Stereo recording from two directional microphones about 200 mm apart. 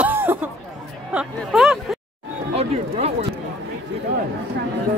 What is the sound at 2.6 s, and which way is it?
Speech, 30° right (ahead or behind).